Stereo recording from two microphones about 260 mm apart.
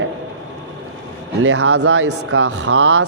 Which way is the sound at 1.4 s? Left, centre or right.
Right.